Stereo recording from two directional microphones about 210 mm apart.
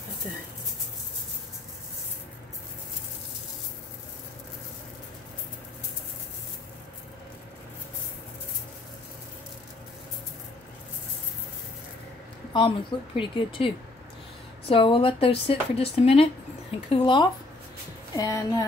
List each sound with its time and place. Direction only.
12.5 s speech: 25° left (ahead or behind)
14.7 s speech: 25° left (ahead or behind)